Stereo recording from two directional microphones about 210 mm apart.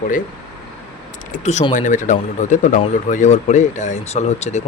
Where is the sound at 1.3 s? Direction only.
35° left (ahead or behind).